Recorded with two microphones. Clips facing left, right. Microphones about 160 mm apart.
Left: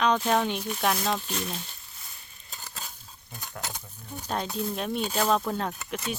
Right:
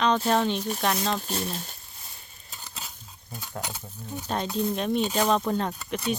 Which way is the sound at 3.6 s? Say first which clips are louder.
Right 1 dB; 10° right (ahead or behind).